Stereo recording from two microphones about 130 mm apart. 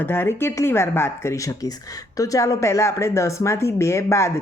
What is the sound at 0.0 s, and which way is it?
Speech, 15° left (ahead or behind).